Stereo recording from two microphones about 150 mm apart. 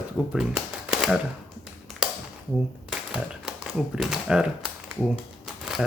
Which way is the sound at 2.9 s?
5° right (ahead or behind).